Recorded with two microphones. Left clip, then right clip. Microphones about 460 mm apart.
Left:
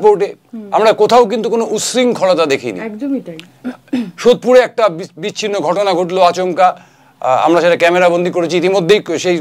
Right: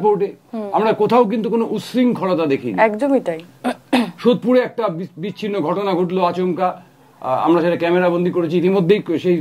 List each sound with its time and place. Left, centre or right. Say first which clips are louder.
0.2 s speech: left 3 dB; left
2.8 s a woman's voice: right 7 dB; right
4.2 s a man's voice: left 9 dB; left